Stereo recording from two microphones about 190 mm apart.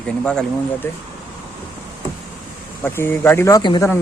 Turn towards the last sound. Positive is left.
turn(degrees=20)  # may be behind; listen again after turning